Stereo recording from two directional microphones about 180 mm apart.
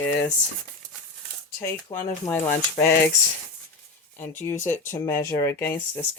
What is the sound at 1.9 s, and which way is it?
Speech, 20° left (ahead or behind).